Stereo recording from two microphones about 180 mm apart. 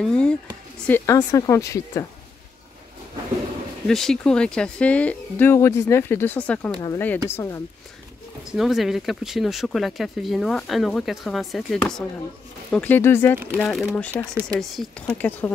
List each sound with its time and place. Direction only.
0.0 s a sound: 5° left (ahead or behind)
0.8 s speech: 15° left (ahead or behind)
3.8 s speech: centre (ahead or behind)
8.5 s speech: centre (ahead or behind)
13.6 s speech: centre (ahead or behind)